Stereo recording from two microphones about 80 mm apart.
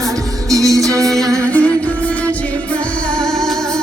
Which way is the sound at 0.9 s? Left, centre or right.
Centre.